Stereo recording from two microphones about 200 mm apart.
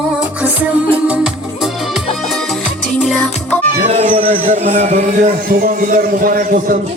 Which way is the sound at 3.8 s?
35° right (ahead or behind).